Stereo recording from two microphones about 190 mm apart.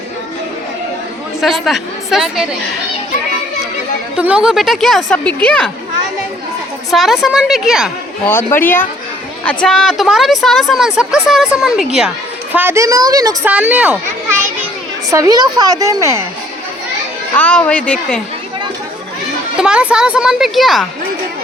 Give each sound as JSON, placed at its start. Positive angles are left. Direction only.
{"t": 1.4, "sound": "a woman's voice", "side_deg": 0}
{"t": 4.2, "sound": "a woman's voice", "side_deg": -5}
{"t": 6.9, "sound": "a woman's voice", "side_deg": 0}
{"t": 8.3, "sound": "a woman's voice", "side_deg": 10}
{"t": 12.5, "sound": "a woman's voice", "side_deg": -15}
{"t": 13.5, "sound": "a woman's voice", "side_deg": -5}
{"t": 15.1, "sound": "a woman's voice", "side_deg": -20}
{"t": 17.3, "sound": "a woman's voice", "side_deg": 5}
{"t": 19.5, "sound": "a woman's voice", "side_deg": -5}